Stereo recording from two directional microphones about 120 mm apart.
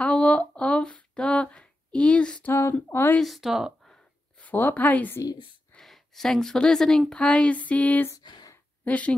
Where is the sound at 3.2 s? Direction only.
Centre (ahead or behind).